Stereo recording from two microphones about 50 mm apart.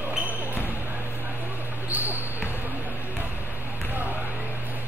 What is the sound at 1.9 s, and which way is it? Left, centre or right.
Basketball bounce, right.